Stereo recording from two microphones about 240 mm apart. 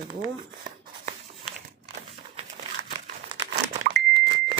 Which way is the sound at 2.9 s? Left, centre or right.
Centre.